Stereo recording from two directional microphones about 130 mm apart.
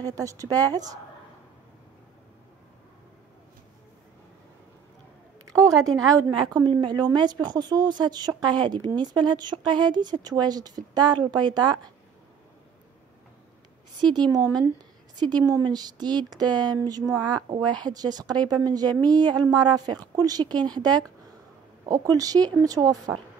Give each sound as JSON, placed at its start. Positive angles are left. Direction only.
{"t": 0.0, "sound": "speech", "side_deg": -25}
{"t": 5.4, "sound": "a woman's voice", "side_deg": -25}
{"t": 14.1, "sound": "a woman's voice", "side_deg": -30}